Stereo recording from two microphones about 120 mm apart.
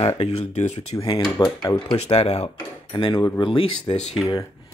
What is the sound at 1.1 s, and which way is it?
Speech, 30° left (ahead or behind).